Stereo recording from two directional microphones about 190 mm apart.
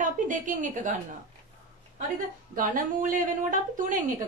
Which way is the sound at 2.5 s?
45° right (ahead or behind).